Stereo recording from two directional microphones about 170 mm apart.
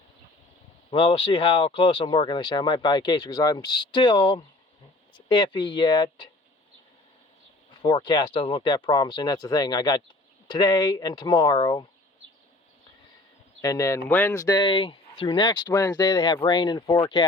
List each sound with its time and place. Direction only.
0.9 s speech: 30° left (ahead or behind)
7.8 s speech: 25° left (ahead or behind)
13.6 s speech: 20° left (ahead or behind)